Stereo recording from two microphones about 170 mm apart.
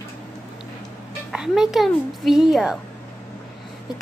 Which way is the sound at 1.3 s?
5° right (ahead or behind).